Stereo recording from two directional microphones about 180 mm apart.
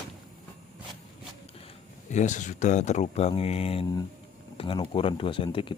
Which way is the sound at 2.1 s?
45° left (ahead or behind).